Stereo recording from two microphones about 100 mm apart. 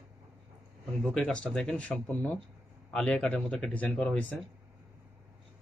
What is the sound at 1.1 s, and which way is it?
Speech, 10° left (ahead or behind).